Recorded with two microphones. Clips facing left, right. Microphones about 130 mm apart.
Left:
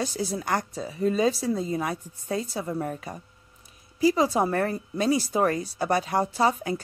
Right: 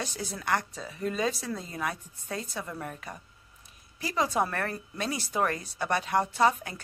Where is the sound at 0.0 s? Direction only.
35° left (ahead or behind).